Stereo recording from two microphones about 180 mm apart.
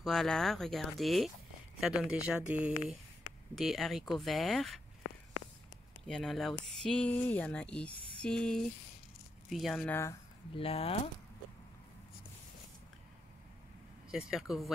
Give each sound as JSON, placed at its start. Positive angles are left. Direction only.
{"t": 0.0, "sound": "speech", "side_deg": 0}
{"t": 6.0, "sound": "speech", "side_deg": 5}
{"t": 10.5, "sound": "speech", "side_deg": 30}
{"t": 14.1, "sound": "speech", "side_deg": -5}